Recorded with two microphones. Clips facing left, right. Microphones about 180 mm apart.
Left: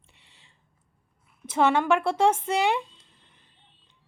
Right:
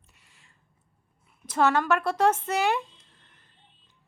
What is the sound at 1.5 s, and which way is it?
Speech, 10° left (ahead or behind).